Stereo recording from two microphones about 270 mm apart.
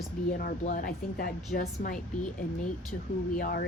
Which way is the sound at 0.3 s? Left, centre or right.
Left.